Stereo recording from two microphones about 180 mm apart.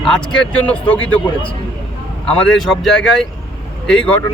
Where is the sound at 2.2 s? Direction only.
5° left (ahead or behind).